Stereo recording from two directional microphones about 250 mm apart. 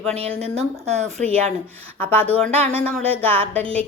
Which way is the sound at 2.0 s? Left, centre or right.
Centre.